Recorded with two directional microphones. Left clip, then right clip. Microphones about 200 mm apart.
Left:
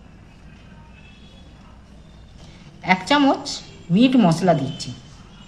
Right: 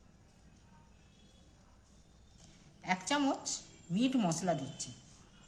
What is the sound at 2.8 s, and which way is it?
A woman's voice, 20° left (ahead or behind).